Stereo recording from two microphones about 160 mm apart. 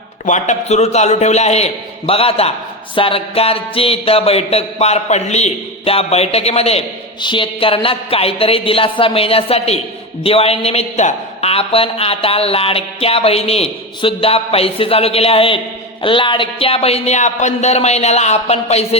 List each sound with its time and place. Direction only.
0.3 s a man's voice: 50° left (ahead or behind)